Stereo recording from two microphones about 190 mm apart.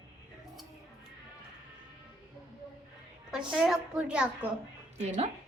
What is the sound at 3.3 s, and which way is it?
Speech, 5° right (ahead or behind).